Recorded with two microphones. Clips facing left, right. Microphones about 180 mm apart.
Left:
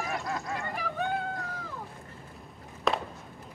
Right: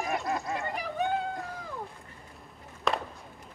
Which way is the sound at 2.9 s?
Centre (ahead or behind).